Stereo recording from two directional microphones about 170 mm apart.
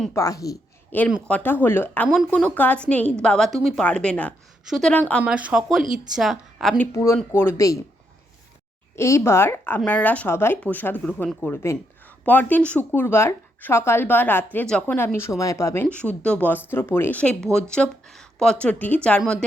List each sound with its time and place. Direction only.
0.1 s a woman's voice: 20° left (ahead or behind)
5.2 s a woman's voice: 10° right (ahead or behind)
6.9 s speech: 15° left (ahead or behind)
9.0 s speech: 15° left (ahead or behind)